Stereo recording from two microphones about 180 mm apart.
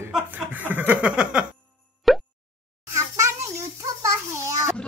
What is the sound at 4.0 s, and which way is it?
Speech, 15° right (ahead or behind).